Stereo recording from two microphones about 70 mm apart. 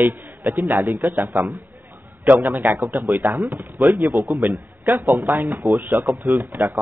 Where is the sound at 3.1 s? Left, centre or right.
Right.